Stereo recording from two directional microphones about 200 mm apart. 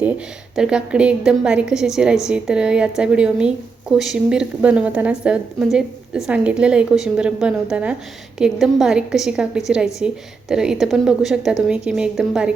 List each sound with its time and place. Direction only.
0.5 s a woman's voice: 5° right (ahead or behind)